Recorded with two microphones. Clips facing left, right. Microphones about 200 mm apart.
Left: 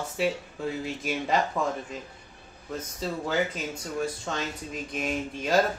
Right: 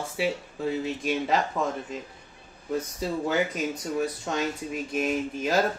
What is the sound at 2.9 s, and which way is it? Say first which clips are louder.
Speech: even; 15° right (ahead or behind).